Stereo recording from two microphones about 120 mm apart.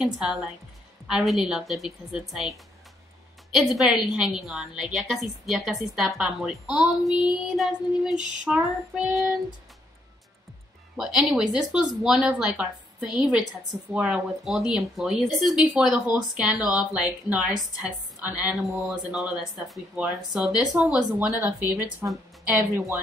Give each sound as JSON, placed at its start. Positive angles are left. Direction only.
{"t": 0.0, "sound": "a woman's voice", "side_deg": -5}
{"t": 11.0, "sound": "a woman's voice", "side_deg": -10}
{"t": 18.9, "sound": "a woman's voice", "side_deg": 0}
{"t": 21.4, "sound": "a woman's voice", "side_deg": -15}